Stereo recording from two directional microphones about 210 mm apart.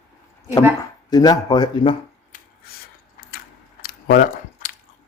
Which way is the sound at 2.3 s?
40° left (ahead or behind).